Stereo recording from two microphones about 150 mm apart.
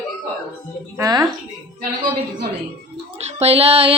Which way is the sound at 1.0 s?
25° right (ahead or behind).